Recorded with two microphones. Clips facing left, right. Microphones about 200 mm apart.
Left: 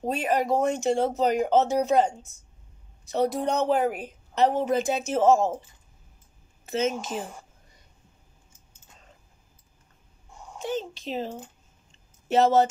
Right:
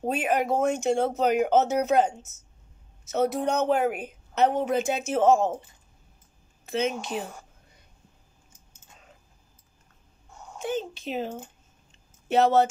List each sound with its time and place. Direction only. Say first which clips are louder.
0.0 s a woman's voice: even; 5° right (ahead or behind)
6.6 s a woman's voice: left 1 dB; centre (ahead or behind)
10.6 s a woman's voice: right 1 dB; centre (ahead or behind)